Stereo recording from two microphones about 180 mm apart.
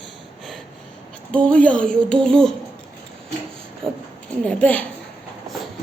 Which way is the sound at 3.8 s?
30° right (ahead or behind).